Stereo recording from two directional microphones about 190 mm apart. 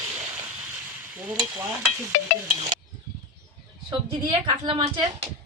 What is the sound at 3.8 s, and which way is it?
A woman's voice, 25° right (ahead or behind).